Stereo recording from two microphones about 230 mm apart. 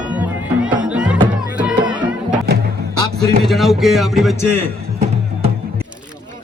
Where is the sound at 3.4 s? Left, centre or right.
Centre.